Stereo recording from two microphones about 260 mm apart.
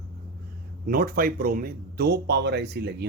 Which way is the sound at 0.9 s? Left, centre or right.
Right.